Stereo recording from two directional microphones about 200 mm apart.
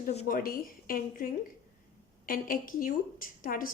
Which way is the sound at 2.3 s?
45° left (ahead or behind).